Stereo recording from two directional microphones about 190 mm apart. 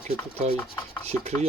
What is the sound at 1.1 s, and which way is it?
Chopping, 15° left (ahead or behind).